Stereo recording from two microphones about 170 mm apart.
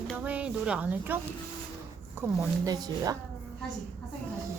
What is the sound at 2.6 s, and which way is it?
Speech, 20° right (ahead or behind).